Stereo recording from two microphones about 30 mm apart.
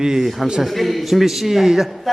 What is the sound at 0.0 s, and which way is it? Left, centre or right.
Speech, right.